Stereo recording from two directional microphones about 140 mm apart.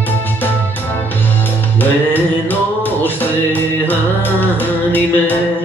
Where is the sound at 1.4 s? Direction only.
15° left (ahead or behind).